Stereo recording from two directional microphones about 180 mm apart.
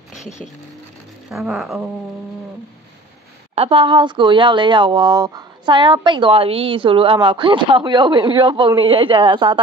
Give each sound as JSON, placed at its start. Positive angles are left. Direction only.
{"t": 0.1, "sound": "vehicle", "side_deg": 40}
{"t": 1.3, "sound": "speech", "side_deg": 0}
{"t": 3.5, "sound": "speech", "side_deg": -30}